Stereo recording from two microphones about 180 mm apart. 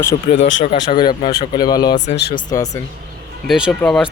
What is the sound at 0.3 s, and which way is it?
Speech, 90° left.